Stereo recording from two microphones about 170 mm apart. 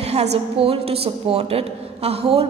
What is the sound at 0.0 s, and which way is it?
A woman's voice, 40° right (ahead or behind).